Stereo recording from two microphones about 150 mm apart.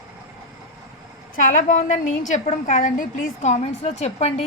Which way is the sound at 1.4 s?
60° left (ahead or behind).